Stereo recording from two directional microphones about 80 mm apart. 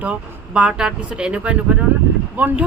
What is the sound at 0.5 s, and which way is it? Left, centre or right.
A woman's voice, centre.